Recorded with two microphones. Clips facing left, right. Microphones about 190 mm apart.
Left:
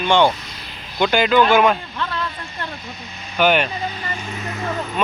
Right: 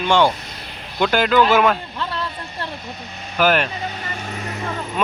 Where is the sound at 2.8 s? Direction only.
55° right (ahead or behind).